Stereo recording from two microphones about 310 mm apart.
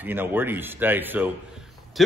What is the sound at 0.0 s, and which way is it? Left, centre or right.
A man's voice, centre.